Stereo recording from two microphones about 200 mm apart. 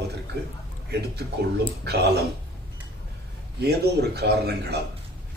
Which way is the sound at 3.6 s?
55° right (ahead or behind).